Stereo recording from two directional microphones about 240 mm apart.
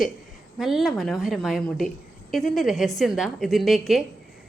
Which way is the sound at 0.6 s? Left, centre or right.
Centre.